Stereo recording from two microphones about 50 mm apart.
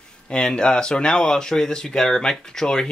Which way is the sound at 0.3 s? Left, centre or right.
Centre.